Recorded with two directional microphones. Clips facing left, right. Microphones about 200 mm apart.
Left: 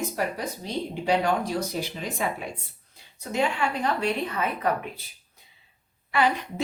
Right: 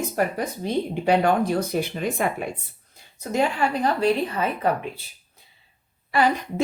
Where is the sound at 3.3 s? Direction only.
35° right (ahead or behind).